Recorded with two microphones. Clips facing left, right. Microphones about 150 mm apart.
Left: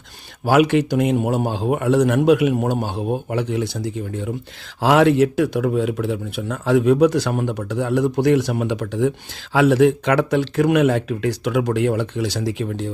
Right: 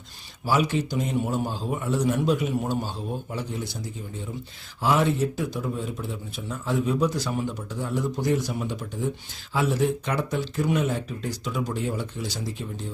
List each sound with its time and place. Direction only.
0.4 s a man's voice: 70° left (ahead or behind)
4.8 s a man's voice: 90° left